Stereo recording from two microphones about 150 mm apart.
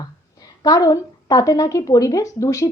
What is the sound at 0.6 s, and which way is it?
A woman's voice, 25° left (ahead or behind).